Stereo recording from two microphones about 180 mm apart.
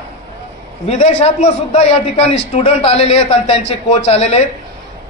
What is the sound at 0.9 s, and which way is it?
A man's voice, 35° left (ahead or behind).